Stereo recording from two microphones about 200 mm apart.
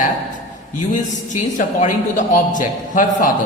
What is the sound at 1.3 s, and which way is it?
A man's voice, 40° left (ahead or behind).